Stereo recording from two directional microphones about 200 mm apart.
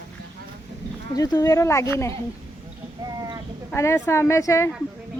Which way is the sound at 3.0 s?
20° right (ahead or behind).